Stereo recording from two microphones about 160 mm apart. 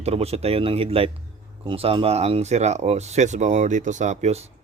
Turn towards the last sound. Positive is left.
turn(degrees=-45)  # may be behind; listen again after turning